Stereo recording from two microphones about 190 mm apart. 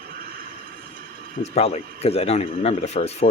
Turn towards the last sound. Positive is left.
turn(degrees=35)  # may be behind; listen again after turning